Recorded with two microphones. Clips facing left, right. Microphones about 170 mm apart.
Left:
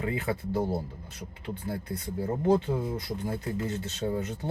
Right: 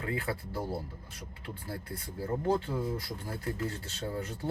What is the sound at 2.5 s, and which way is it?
Speech, 20° left (ahead or behind).